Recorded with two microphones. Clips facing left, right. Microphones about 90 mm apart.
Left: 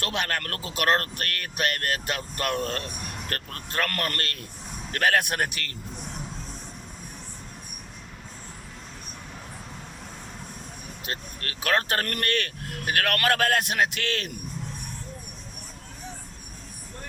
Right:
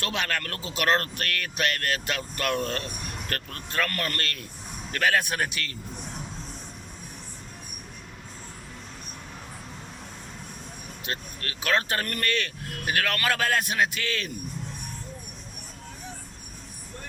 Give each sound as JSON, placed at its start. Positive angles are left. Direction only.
{"t": 0.0, "sound": "speech", "side_deg": 45}
{"t": 11.0, "sound": "a man's voice", "side_deg": 40}